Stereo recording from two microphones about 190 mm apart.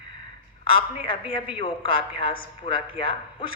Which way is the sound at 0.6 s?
30° left (ahead or behind).